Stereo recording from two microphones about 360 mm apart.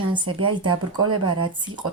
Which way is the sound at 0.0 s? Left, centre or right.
Centre.